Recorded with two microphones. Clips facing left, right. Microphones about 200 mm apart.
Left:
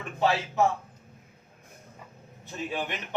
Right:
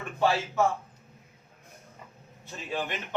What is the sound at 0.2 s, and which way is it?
Speech, 15° left (ahead or behind).